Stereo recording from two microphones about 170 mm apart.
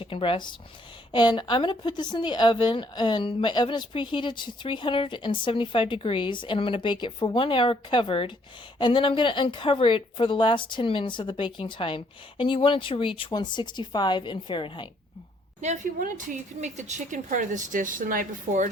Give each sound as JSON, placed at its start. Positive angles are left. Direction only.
{"t": 0.0, "sound": "a woman's voice", "side_deg": 30}
{"t": 15.6, "sound": "a woman's voice", "side_deg": -45}